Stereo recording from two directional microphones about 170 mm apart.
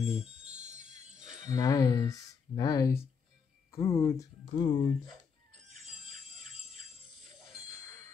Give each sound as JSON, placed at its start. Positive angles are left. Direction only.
{"t": 0.6, "sound": "jingle bell", "side_deg": -45}
{"t": 1.4, "sound": "speech", "side_deg": 20}
{"t": 7.2, "sound": "music", "side_deg": 0}